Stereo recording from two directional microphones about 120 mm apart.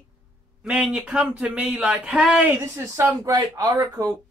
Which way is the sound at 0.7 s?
10° right (ahead or behind).